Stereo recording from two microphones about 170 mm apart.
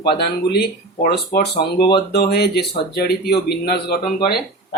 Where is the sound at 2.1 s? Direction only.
70° left (ahead or behind).